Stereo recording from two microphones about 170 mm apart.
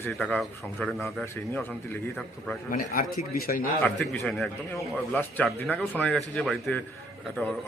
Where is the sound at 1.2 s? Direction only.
10° left (ahead or behind).